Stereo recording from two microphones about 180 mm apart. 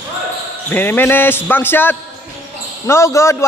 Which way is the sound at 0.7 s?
10° left (ahead or behind).